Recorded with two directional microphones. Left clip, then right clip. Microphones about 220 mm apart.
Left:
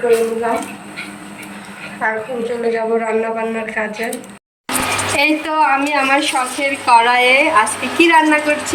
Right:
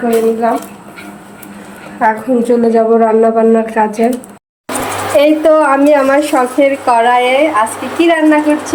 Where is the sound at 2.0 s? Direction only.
45° right (ahead or behind).